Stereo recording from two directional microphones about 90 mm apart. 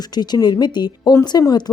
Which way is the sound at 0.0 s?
50° left (ahead or behind).